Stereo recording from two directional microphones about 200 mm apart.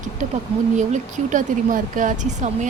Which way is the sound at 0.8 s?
40° right (ahead or behind).